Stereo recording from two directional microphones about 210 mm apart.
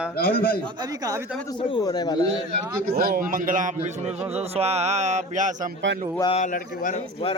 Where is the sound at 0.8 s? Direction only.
15° right (ahead or behind).